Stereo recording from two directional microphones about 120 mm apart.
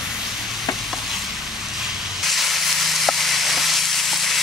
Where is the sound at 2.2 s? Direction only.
Centre (ahead or behind).